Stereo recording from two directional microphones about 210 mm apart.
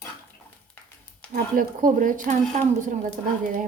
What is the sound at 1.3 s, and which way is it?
Speech, 40° right (ahead or behind).